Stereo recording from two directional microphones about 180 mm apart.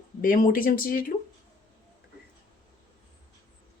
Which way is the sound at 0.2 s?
50° left (ahead or behind).